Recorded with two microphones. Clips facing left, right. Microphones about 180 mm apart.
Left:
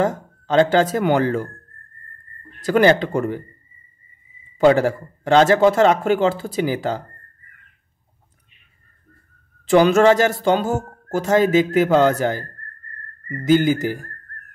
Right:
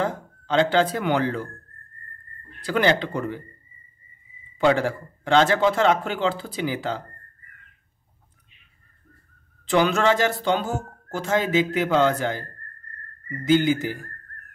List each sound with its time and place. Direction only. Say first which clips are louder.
0.0 s speech: left 6 dB; 45° left (ahead or behind)
2.6 s speech: left 6 dB; 45° left (ahead or behind)
4.6 s speech: left 6 dB; 40° left (ahead or behind)
9.7 s speech: left 7 dB; 40° left (ahead or behind)